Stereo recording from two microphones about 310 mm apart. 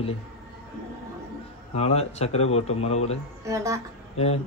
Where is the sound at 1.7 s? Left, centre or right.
Centre.